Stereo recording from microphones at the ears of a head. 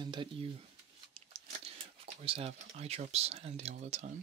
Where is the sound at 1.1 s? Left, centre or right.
Right.